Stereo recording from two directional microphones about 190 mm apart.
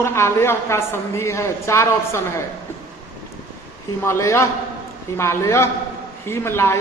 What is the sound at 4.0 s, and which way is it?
A man's voice, 15° left (ahead or behind).